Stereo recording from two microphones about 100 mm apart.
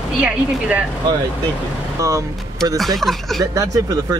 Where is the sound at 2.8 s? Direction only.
Centre (ahead or behind).